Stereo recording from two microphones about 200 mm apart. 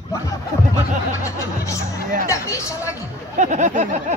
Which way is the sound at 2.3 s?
15° left (ahead or behind).